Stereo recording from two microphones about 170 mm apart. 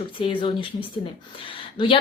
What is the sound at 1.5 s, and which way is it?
Speech, 30° left (ahead or behind).